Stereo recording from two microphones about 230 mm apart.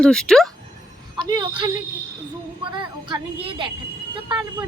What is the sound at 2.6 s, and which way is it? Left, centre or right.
Music, right.